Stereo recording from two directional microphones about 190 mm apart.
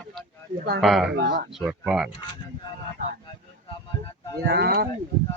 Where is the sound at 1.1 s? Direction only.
60° right (ahead or behind).